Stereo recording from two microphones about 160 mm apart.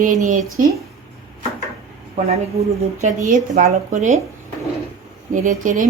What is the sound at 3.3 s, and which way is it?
Speech, 50° right (ahead or behind).